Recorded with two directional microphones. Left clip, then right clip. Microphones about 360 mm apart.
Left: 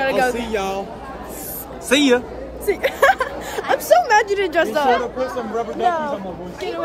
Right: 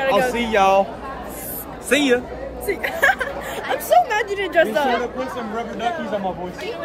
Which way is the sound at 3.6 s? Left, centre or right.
Centre.